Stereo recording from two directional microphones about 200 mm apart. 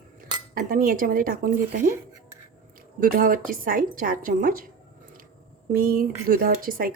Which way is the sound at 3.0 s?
45° right (ahead or behind).